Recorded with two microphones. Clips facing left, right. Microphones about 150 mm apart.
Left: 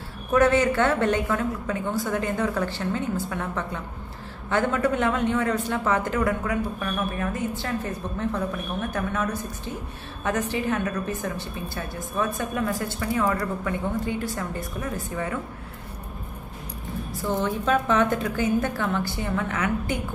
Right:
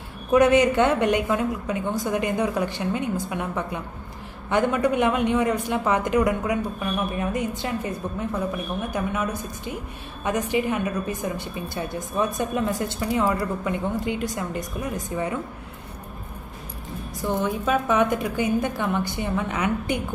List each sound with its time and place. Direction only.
0.3 s speech: 15° right (ahead or behind)
17.2 s speech: 15° right (ahead or behind)